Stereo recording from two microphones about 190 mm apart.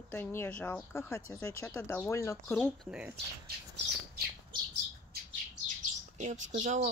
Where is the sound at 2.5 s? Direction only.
Centre (ahead or behind).